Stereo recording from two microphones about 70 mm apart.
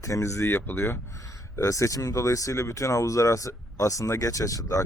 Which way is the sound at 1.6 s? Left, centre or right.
Left.